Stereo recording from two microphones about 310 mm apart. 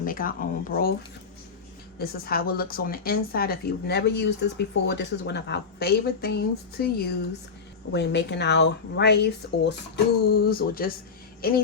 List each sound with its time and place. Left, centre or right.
0.0 s speech: left
2.0 s a woman's voice: left